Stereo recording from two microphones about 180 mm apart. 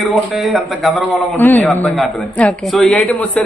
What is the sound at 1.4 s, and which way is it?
A man's voice, 10° left (ahead or behind).